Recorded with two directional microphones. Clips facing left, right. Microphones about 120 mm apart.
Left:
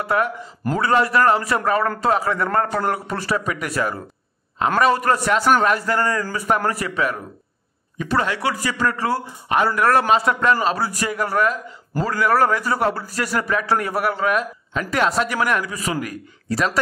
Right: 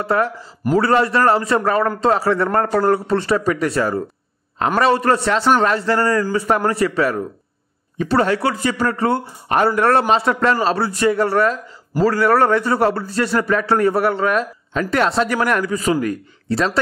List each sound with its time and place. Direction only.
0.0 s a man's voice: 30° right (ahead or behind)